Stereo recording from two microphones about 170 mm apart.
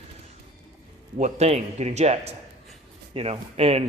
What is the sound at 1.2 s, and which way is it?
Speech, 40° right (ahead or behind).